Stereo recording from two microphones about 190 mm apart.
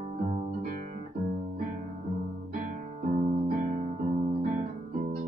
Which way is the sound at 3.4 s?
45° right (ahead or behind).